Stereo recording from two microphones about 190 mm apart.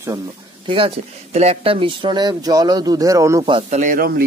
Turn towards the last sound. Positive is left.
turn(degrees=-50)  # may be behind; listen again after turning